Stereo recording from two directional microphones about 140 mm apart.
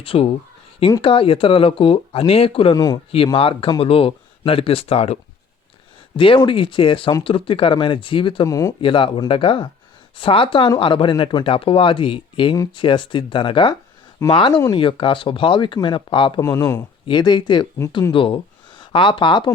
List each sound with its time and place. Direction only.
0.0 s speech: 40° left (ahead or behind)
2.7 s speech: 25° left (ahead or behind)
3.3 s speech: 40° left (ahead or behind)
8.4 s speech: 25° left (ahead or behind)
8.8 s speech: 40° left (ahead or behind)
16.4 s speech: 25° left (ahead or behind)